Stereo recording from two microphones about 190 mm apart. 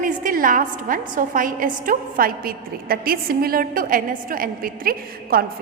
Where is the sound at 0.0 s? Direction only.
45° right (ahead or behind).